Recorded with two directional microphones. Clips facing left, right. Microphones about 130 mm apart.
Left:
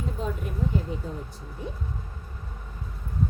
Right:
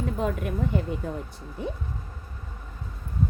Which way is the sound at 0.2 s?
65° right (ahead or behind).